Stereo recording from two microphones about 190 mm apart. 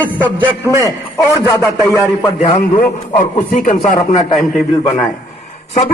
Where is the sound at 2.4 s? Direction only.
30° left (ahead or behind).